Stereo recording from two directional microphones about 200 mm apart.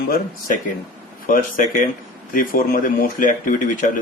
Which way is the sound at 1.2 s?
45° left (ahead or behind).